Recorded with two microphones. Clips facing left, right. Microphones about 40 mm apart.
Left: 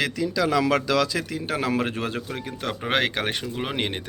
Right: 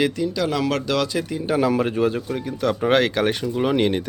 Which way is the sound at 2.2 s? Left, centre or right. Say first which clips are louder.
Right 7 dB; left.